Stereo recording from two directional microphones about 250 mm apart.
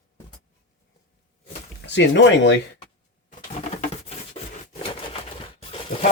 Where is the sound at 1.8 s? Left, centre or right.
Left.